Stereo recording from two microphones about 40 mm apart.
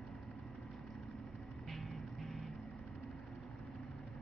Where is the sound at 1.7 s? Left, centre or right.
Centre.